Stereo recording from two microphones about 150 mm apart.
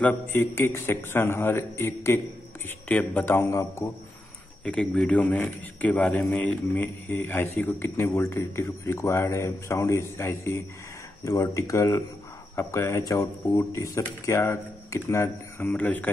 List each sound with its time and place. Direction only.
0.0 s a man's voice: 10° left (ahead or behind)
4.6 s a man's voice: 5° left (ahead or behind)